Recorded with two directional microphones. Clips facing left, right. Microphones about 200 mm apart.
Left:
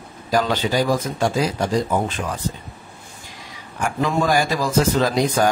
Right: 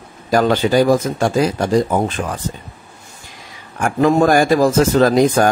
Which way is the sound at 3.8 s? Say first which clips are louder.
Right 7 dB; 55° right (ahead or behind).